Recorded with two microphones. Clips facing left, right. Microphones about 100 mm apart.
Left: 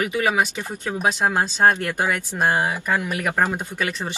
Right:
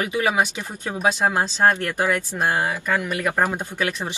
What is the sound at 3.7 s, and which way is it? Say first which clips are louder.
Speech: right 1 dB; 15° right (ahead or behind).